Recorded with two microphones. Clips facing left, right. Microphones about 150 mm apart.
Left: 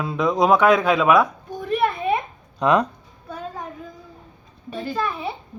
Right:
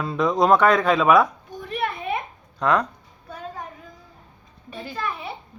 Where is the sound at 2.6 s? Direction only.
20° left (ahead or behind).